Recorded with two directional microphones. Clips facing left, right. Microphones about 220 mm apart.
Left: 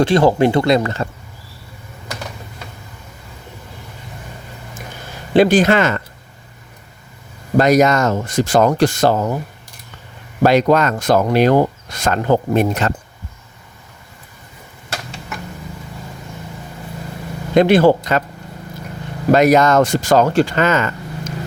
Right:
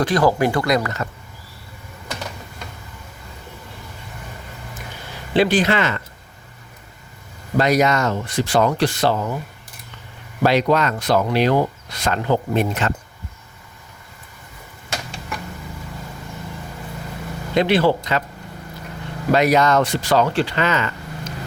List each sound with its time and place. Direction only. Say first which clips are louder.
0.0 s speech: left 4 dB; 25° left (ahead or behind)
5.3 s speech: left 5 dB; 45° left (ahead or behind)
7.5 s speech: left 5 dB; 45° left (ahead or behind)
10.4 s speech: left 4 dB; 45° left (ahead or behind)
17.5 s speech: left 6 dB; 50° left (ahead or behind)
19.3 s speech: left 4 dB; 45° left (ahead or behind)